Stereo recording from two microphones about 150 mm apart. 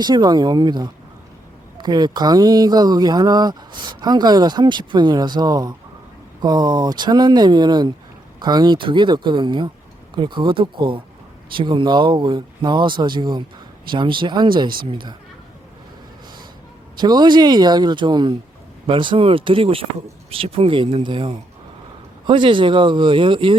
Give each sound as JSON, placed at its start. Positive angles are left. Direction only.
{"t": 0.0, "sound": "speech", "side_deg": -30}
{"t": 17.0, "sound": "speech", "side_deg": -30}